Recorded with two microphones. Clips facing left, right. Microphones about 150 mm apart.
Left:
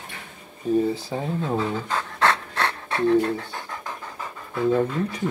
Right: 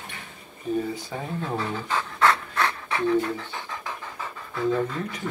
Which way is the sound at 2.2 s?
60° left (ahead or behind).